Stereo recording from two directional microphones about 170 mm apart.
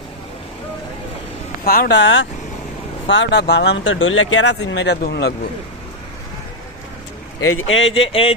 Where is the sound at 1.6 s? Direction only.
60° left (ahead or behind).